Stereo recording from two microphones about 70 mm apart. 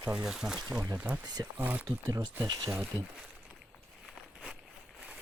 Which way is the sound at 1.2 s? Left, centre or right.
Right.